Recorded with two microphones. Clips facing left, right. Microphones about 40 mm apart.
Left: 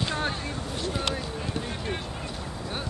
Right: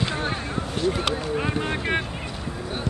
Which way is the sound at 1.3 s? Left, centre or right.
Right.